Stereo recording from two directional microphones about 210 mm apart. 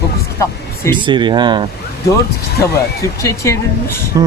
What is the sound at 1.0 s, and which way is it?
Speech, 20° right (ahead or behind).